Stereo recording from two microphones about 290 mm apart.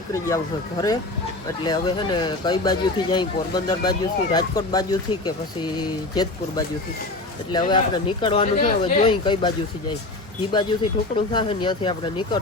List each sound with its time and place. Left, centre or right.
0.1 s speech: centre
7.5 s speech: centre
10.5 s speech: centre